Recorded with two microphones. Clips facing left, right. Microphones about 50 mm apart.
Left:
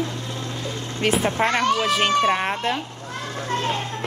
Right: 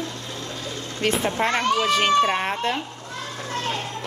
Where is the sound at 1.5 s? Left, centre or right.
Centre.